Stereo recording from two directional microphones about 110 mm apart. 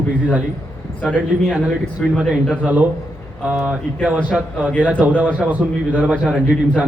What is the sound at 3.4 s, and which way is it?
A man's voice, 15° right (ahead or behind).